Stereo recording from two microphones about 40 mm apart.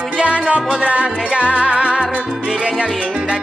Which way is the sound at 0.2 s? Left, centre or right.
Right.